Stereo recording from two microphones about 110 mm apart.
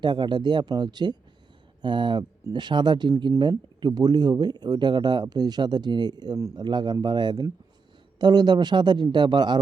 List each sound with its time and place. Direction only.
0.0 s speech: 45° right (ahead or behind)